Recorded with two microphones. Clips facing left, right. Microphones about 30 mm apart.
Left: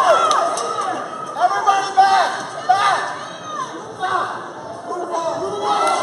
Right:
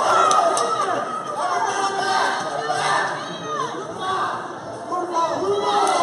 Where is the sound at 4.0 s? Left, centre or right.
Centre.